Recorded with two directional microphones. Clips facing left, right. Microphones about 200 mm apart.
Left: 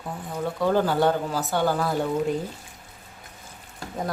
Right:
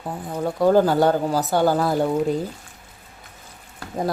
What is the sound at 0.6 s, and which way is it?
Speech, 40° right (ahead or behind).